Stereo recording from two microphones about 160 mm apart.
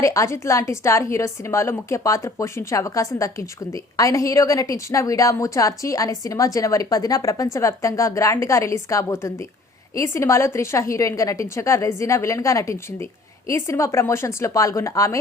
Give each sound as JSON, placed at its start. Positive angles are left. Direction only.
{"t": 0.0, "sound": "a woman's voice", "side_deg": 20}